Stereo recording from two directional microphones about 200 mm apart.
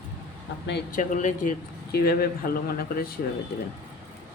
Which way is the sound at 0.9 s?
40° left (ahead or behind).